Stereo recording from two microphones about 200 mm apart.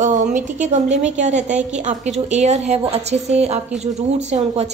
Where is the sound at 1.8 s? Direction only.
35° right (ahead or behind).